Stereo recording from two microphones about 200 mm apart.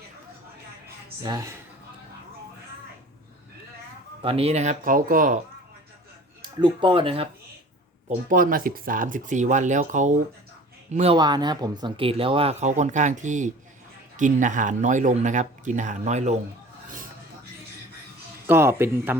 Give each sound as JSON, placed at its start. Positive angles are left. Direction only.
{"t": 1.2, "sound": "speech", "side_deg": -20}
{"t": 4.2, "sound": "speech", "side_deg": -30}
{"t": 6.6, "sound": "speech", "side_deg": -25}
{"t": 8.3, "sound": "speech", "side_deg": -45}
{"t": 18.4, "sound": "speech", "side_deg": -10}